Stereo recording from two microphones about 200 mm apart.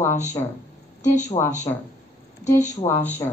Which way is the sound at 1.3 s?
25° left (ahead or behind).